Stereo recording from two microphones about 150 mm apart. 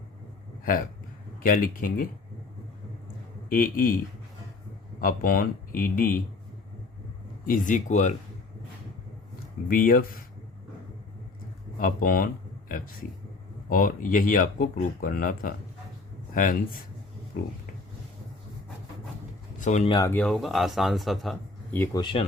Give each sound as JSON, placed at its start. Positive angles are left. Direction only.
{"t": 1.4, "sound": "speech", "side_deg": 70}
{"t": 3.5, "sound": "speech", "side_deg": 70}
{"t": 4.9, "sound": "speech", "side_deg": 70}
{"t": 7.4, "sound": "speech", "side_deg": 65}
{"t": 9.6, "sound": "speech", "side_deg": 70}
{"t": 11.8, "sound": "speech", "side_deg": 65}
{"t": 19.5, "sound": "speech", "side_deg": 55}
{"t": 20.1, "sound": "speech", "side_deg": 10}
{"t": 21.9, "sound": "speech", "side_deg": 35}